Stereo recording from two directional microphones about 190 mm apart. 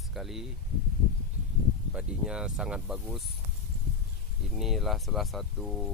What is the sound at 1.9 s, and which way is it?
Speech, 5° right (ahead or behind).